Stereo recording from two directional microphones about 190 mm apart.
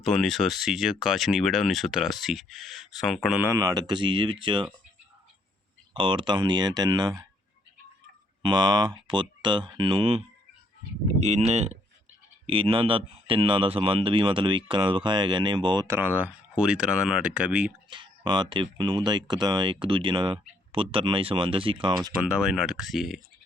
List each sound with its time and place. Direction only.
0.0 s speech: centre (ahead or behind)
3.5 s speech: 20° right (ahead or behind)
5.9 s speech: 25° right (ahead or behind)
8.4 s speech: 20° right (ahead or behind); by 17.7 s 5° right (ahead or behind)
17.8 s speech: 25° right (ahead or behind)
22.2 s speech: 5° right (ahead or behind)